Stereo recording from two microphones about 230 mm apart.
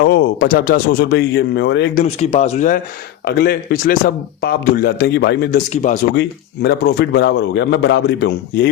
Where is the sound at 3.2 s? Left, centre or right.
Left.